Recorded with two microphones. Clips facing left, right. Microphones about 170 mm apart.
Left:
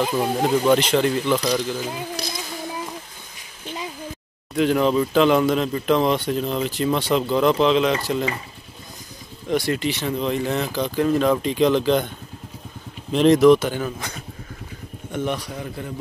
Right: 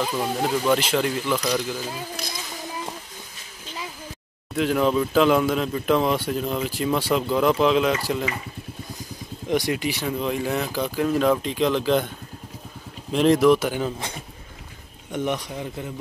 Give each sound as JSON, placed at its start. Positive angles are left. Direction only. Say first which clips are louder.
{"t": 0.0, "sound": "speech", "louder": "left 3 dB", "side_deg": 15}
{"t": 0.7, "sound": "speech", "louder": "left 4 dB", "side_deg": -5}
{"t": 4.6, "sound": "speech", "louder": "left 2 dB", "side_deg": 0}
{"t": 9.5, "sound": "speech", "louder": "left 1 dB", "side_deg": -15}
{"t": 13.1, "sound": "speech", "louder": "left 3 dB", "side_deg": -5}
{"t": 13.7, "sound": "speech", "louder": "right 1 dB", "side_deg": -20}